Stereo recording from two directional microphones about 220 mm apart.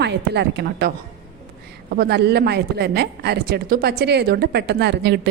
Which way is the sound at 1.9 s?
50° right (ahead or behind).